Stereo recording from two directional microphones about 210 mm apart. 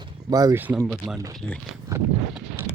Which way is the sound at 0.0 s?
20° right (ahead or behind).